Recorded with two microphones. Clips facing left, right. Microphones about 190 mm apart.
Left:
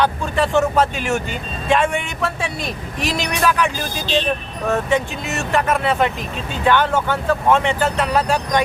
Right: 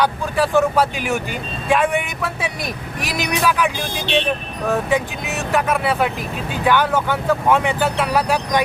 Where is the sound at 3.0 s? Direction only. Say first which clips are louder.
Left 1 dB; 10° right (ahead or behind).